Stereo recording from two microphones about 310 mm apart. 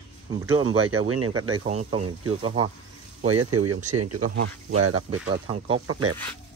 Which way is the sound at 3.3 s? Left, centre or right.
Right.